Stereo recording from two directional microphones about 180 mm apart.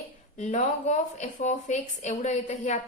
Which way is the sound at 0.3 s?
40° left (ahead or behind).